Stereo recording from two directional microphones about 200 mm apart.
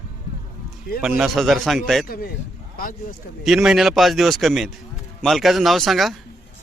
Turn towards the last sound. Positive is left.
turn(degrees=0)  # may be behind; listen again after turning